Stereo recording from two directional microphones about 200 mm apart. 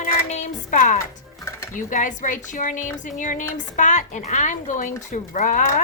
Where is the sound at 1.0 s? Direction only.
15° left (ahead or behind).